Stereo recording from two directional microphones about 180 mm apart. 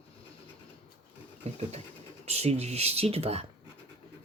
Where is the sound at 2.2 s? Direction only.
35° right (ahead or behind).